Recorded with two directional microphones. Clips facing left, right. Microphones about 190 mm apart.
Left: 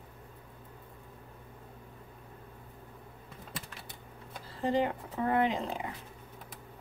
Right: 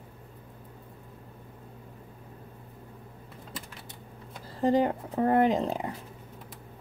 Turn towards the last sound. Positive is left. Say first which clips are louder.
# right 6 dB
turn(degrees=-40)  # may be behind; listen again after turning